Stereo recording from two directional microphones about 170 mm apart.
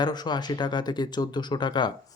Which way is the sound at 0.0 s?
25° left (ahead or behind).